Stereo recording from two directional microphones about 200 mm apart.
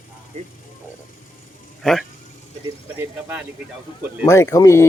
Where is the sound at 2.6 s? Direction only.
10° right (ahead or behind).